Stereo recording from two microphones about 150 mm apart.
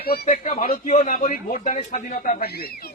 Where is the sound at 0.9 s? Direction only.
55° left (ahead or behind); by 2.9 s 85° left.